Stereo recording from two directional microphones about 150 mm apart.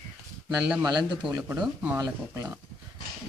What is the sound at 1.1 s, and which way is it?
Speech, 30° right (ahead or behind).